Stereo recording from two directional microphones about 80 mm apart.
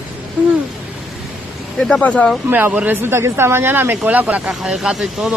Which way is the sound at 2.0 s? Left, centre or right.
Centre.